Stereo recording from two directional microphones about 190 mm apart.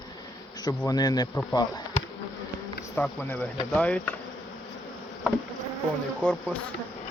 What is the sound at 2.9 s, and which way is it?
Speech, 5° left (ahead or behind).